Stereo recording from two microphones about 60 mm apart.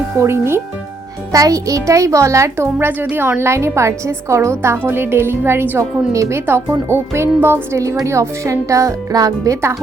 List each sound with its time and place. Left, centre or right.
0.2 s a woman's voice: right
1.3 s a child's voice: right
2.7 s a woman's voice: right
6.1 s a child's voice: right
6.4 s a woman's voice: right